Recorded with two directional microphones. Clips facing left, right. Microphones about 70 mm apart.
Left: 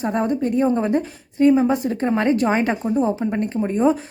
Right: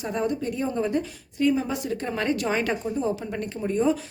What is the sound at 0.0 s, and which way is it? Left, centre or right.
A woman's voice, left.